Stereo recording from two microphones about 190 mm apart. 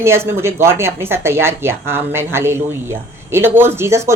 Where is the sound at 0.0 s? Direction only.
15° right (ahead or behind).